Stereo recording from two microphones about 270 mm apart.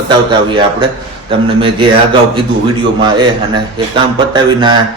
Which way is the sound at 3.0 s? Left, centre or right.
Centre.